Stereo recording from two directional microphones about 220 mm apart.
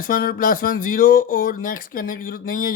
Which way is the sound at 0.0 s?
40° left (ahead or behind).